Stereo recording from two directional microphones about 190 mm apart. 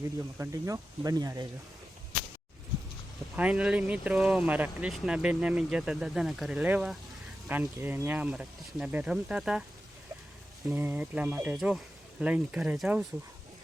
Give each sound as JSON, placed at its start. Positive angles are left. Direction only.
{"t": 0.3, "sound": "speech", "side_deg": -15}
{"t": 3.3, "sound": "speech", "side_deg": -5}
{"t": 10.8, "sound": "speech", "side_deg": -10}